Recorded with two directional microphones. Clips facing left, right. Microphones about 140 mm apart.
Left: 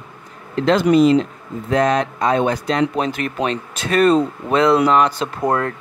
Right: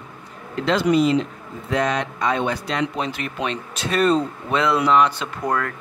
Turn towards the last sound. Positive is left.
turn(degrees=30)  # may be behind; listen again after turning